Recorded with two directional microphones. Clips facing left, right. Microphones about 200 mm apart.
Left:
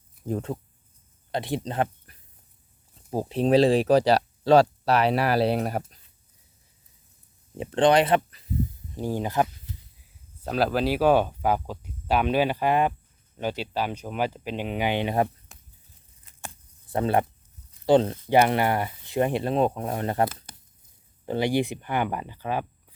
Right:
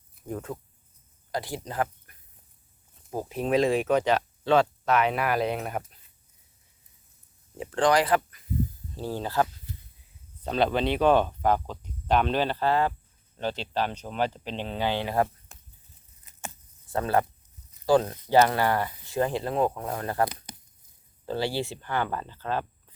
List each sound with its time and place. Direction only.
0.3 s speech: 25° left (ahead or behind)
7.6 s speech: 25° left (ahead or behind)
9.0 s speech: 15° left (ahead or behind)
10.4 s speech: 5° left (ahead or behind); by 15.3 s 20° left (ahead or behind)
16.9 s speech: 20° left (ahead or behind)